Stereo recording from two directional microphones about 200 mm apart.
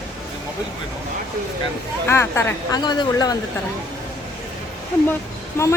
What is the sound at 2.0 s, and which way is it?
A woman's voice, 15° left (ahead or behind).